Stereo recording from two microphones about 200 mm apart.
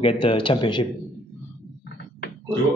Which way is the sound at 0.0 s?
25° left (ahead or behind).